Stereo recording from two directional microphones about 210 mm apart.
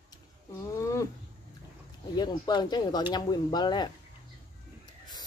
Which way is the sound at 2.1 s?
20° left (ahead or behind).